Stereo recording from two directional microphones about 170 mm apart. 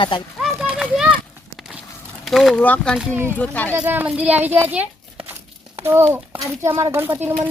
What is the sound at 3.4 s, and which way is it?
Speech, 10° left (ahead or behind).